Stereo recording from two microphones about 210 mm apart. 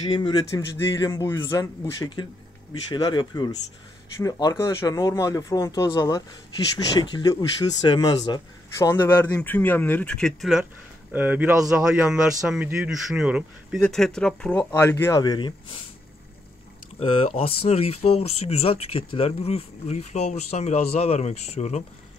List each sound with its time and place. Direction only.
0.0 s speech: 20° left (ahead or behind)
17.0 s speech: 25° left (ahead or behind)